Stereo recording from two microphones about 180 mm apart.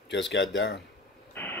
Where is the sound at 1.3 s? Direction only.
10° left (ahead or behind).